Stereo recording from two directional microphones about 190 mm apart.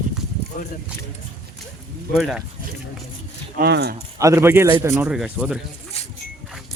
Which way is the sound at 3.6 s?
55° right (ahead or behind).